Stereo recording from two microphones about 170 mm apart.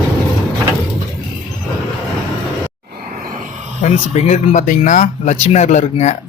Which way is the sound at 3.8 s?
40° left (ahead or behind).